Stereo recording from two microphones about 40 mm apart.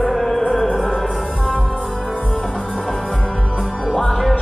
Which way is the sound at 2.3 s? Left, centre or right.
Centre.